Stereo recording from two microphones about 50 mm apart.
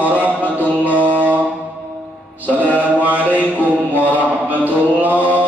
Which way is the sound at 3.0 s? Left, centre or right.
Right.